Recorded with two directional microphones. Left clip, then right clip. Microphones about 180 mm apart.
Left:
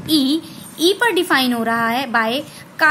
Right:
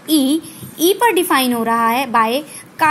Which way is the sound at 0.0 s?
35° right (ahead or behind).